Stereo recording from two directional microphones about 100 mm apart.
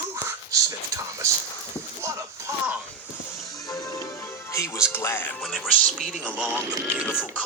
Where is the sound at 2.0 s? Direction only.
30° right (ahead or behind).